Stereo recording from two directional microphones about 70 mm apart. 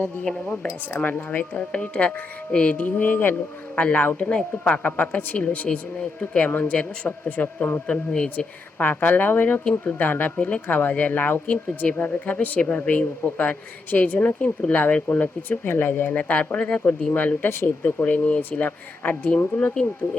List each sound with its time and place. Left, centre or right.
0.3 s speech: centre
8.1 s speech: centre
8.8 s speech: left